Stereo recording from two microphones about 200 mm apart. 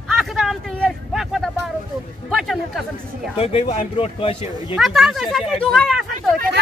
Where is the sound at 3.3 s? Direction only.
30° left (ahead or behind).